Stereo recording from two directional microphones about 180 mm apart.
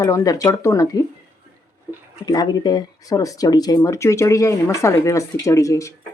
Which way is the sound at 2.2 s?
25° left (ahead or behind).